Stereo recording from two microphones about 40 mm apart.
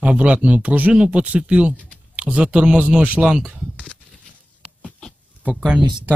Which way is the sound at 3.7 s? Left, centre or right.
Left.